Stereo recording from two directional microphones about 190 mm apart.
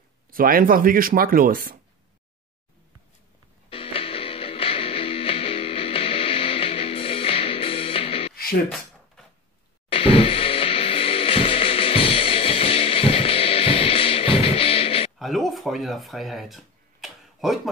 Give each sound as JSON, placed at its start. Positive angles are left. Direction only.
{"t": 0.3, "sound": "speech", "side_deg": -50}
{"t": 3.7, "sound": "music", "side_deg": 30}
{"t": 8.6, "sound": "a sound", "side_deg": 0}
{"t": 9.8, "sound": "music", "side_deg": 30}
{"t": 15.1, "sound": "speech", "side_deg": 0}